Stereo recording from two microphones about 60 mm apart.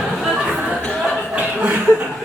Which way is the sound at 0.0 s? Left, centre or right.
Centre.